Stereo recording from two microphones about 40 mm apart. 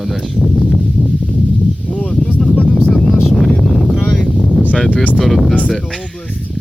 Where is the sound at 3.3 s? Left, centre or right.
Centre.